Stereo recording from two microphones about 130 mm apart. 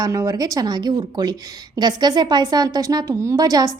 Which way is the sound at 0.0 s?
30° right (ahead or behind).